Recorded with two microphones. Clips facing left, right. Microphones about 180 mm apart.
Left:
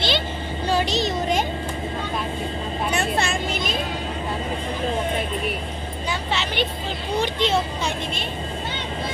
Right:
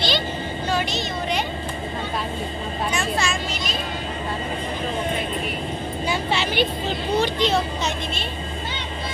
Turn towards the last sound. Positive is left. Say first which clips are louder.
# right 2 dB
turn(degrees=25)  # may be behind; listen again after turning